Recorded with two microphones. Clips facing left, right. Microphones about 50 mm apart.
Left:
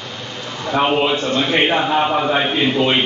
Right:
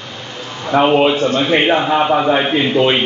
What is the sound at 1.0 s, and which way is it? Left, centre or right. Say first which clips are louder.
A man's voice: right 4 dB; centre.